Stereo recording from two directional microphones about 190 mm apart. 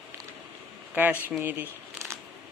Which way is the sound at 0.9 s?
10° right (ahead or behind).